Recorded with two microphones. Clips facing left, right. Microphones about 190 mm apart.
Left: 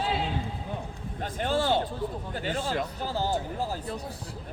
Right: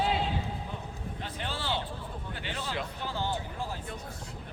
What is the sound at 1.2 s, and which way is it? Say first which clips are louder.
Speech: left 11 dB; 45° left (ahead or behind).